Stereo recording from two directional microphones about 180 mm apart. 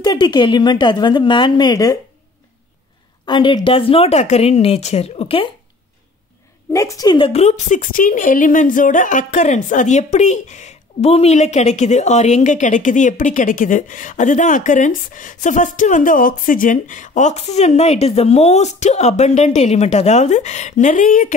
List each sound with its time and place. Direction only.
0.0 s a woman's voice: 25° left (ahead or behind)
3.3 s a woman's voice: 25° left (ahead or behind)
6.7 s a woman's voice: 15° left (ahead or behind); by 21.3 s 45° left (ahead or behind)